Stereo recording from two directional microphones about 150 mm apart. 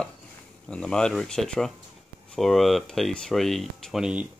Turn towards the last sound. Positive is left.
turn(degrees=-5)  # may be behind; listen again after turning